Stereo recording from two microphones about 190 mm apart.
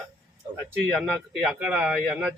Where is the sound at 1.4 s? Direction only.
5° right (ahead or behind).